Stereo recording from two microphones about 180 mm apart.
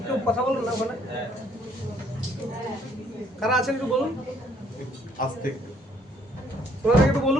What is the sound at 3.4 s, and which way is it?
Speech, centre (ahead or behind).